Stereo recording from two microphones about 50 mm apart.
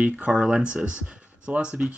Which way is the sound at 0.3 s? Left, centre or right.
Centre.